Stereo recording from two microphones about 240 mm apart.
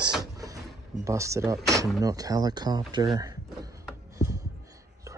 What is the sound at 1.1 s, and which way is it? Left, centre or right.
Speech, centre.